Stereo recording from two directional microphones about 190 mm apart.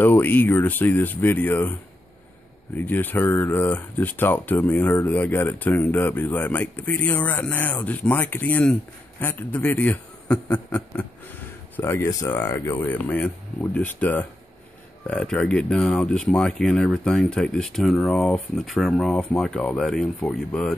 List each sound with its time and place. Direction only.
0.0 s speech: 10° left (ahead or behind)